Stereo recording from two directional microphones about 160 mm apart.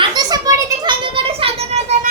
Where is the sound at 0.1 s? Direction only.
25° right (ahead or behind).